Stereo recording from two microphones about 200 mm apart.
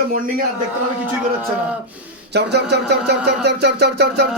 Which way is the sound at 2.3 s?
55° right (ahead or behind).